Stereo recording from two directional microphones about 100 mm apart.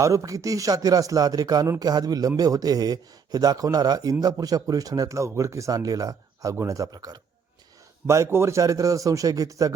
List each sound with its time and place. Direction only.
0.0 s a man's voice: 30° right (ahead or behind)
8.0 s a man's voice: 30° right (ahead or behind)